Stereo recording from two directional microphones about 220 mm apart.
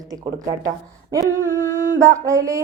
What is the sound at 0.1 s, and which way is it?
Speech, 15° right (ahead or behind).